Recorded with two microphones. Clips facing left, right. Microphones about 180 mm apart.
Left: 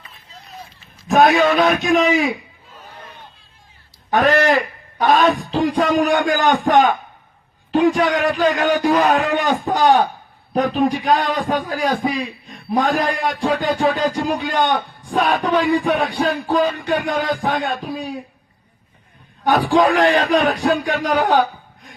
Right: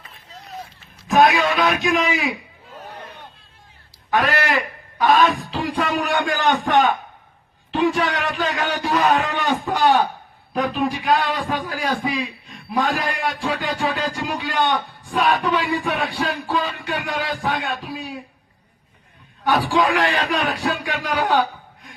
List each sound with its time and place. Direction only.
1.0 s a man's voice: 45° left (ahead or behind)
4.1 s a man's voice: 45° left (ahead or behind)
19.5 s a man's voice: 40° left (ahead or behind)